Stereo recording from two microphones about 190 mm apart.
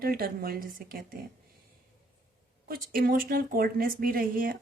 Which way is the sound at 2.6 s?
50° right (ahead or behind).